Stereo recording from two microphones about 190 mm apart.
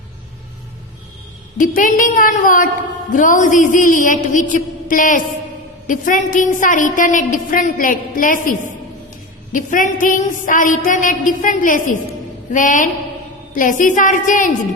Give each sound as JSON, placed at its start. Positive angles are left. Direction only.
{"t": 1.5, "sound": "a woman's voice", "side_deg": 45}